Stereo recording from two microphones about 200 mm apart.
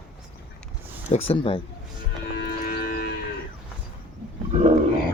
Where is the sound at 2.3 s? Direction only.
50° left (ahead or behind).